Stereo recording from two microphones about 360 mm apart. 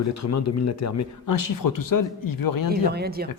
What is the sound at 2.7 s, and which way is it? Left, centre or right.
Speech, right.